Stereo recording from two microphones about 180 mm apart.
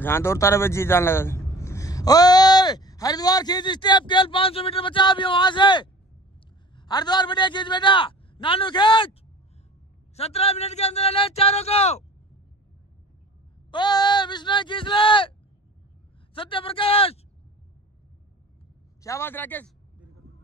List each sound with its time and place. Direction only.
0.0 s a man's voice: 15° left (ahead or behind)
10.1 s speech: 35° left (ahead or behind)
13.7 s a man's voice: 25° left (ahead or behind)
16.3 s a man's voice: 30° left (ahead or behind)
19.0 s a man's voice: 15° left (ahead or behind)